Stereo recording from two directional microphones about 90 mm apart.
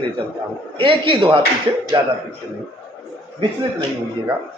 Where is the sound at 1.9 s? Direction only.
55° right (ahead or behind).